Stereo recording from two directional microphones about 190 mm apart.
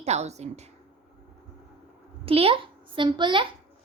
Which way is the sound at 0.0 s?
35° right (ahead or behind).